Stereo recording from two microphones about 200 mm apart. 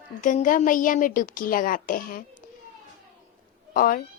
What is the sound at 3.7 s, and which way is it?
Speech, 45° left (ahead or behind).